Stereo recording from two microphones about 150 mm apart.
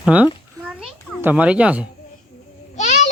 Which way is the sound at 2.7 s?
50° left (ahead or behind).